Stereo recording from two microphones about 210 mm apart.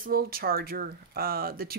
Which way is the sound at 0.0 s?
45° right (ahead or behind).